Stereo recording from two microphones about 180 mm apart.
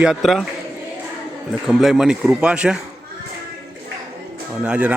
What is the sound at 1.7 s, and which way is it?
Speech, centre (ahead or behind).